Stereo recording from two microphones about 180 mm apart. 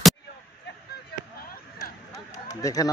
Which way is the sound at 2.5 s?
20° left (ahead or behind).